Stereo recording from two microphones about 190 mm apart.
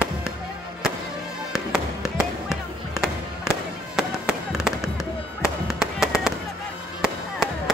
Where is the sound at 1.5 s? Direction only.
15° left (ahead or behind).